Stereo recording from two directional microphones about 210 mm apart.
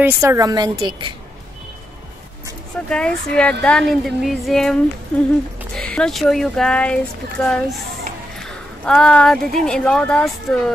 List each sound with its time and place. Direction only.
0.0 s a woman's voice: 10° right (ahead or behind)
2.9 s speech: 5° left (ahead or behind)
5.8 s speech: 5° left (ahead or behind)